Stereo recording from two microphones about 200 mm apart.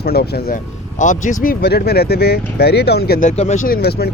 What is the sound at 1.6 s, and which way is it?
Speech, 50° left (ahead or behind).